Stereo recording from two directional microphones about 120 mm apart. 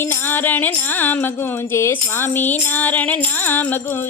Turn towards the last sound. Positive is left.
turn(degrees=15)  # may be behind; listen again after turning